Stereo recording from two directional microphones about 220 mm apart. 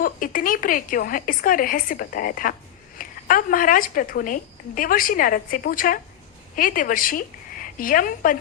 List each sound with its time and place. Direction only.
0.0 s a woman's voice: 40° left (ahead or behind)